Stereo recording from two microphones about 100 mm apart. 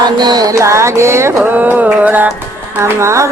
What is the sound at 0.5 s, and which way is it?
Speech, 30° right (ahead or behind).